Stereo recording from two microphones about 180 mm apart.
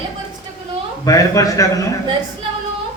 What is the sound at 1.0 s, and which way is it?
Speech, 20° left (ahead or behind).